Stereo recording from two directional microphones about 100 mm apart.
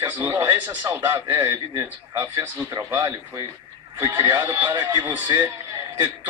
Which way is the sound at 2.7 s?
30° right (ahead or behind).